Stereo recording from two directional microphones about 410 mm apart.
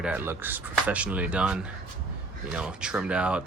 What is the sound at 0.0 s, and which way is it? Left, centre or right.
Speech, centre.